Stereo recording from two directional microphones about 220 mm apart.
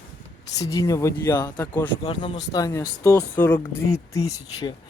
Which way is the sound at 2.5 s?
15° left (ahead or behind).